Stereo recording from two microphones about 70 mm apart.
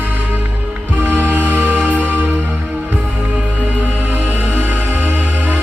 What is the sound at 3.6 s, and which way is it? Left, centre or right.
Music, right.